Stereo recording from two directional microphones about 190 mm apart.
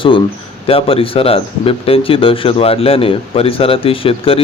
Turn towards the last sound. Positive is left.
turn(degrees=30)  # may be behind; listen again after turning